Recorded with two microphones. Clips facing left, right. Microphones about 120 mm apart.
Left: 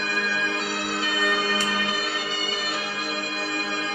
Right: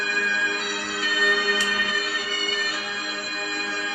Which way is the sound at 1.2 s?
30° left (ahead or behind).